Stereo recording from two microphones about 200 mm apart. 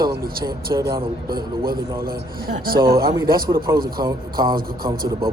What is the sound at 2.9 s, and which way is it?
A man's voice, 20° right (ahead or behind).